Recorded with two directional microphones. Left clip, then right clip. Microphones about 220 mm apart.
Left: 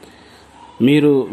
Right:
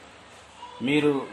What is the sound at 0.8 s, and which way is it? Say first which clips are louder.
Speech: left 9 dB; 40° left (ahead or behind).